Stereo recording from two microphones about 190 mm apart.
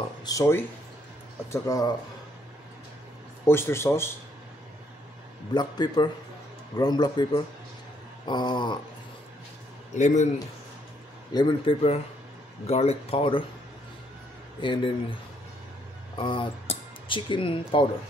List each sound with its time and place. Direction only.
0.2 s speech: 20° left (ahead or behind)
3.4 s speech: 10° left (ahead or behind)
5.5 s a man's voice: 20° left (ahead or behind)
9.9 s speech: 40° left (ahead or behind)
11.3 s a man's voice: 25° left (ahead or behind)
14.6 s a man's voice: 25° left (ahead or behind)
16.2 s speech: 25° left (ahead or behind)